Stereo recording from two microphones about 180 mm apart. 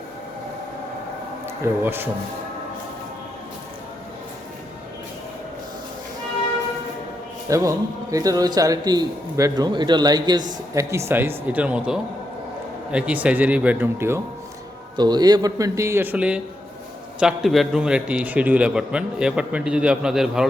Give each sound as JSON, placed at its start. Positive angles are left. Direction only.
{"t": 1.6, "sound": "speech", "side_deg": -10}
{"t": 7.4, "sound": "a man's voice", "side_deg": -20}
{"t": 14.9, "sound": "a man's voice", "side_deg": -25}